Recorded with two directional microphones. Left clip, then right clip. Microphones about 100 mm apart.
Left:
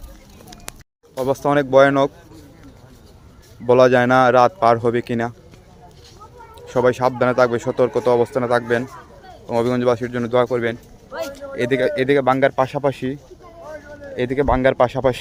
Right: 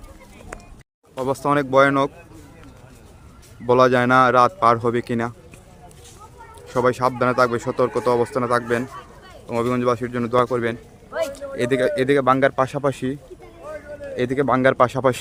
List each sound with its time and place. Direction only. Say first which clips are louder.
1.2 s a man's voice: left 2 dB; 10° left (ahead or behind)
3.7 s a man's voice: left 2 dB; 15° left (ahead or behind)
6.6 s a man's voice: left 2 dB; 10° left (ahead or behind)
14.5 s speech: even; 15° right (ahead or behind)